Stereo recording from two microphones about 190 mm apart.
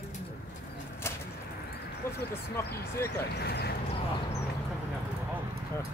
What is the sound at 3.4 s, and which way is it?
Speech, 60° left (ahead or behind).